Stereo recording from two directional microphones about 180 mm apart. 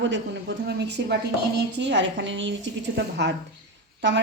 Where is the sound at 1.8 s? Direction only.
85° right.